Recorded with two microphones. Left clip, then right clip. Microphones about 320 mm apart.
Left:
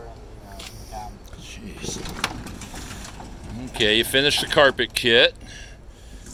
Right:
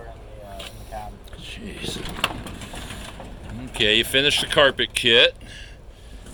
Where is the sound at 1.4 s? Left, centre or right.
Centre.